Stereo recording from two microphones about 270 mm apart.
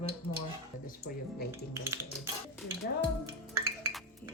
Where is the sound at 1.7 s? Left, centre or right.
Centre.